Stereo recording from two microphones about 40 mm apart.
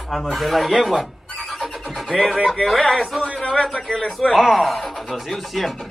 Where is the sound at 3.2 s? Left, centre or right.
Left.